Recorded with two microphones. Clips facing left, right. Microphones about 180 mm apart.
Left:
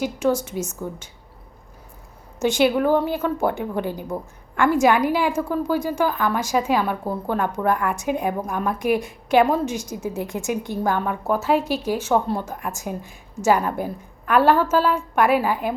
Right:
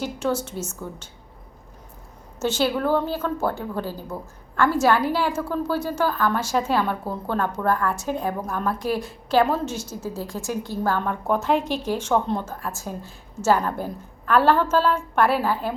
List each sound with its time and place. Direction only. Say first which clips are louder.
0.0 s a woman's voice: left 4 dB; 10° left (ahead or behind)
2.4 s a woman's voice: left 4 dB; 15° left (ahead or behind)